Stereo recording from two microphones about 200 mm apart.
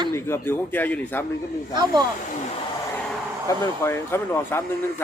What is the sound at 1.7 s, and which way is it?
Speech, 20° right (ahead or behind).